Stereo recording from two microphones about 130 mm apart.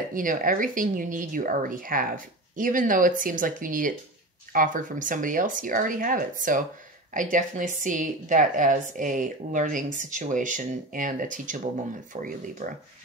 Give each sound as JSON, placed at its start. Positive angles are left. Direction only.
{"t": 0.1, "sound": "a woman's voice", "side_deg": -90}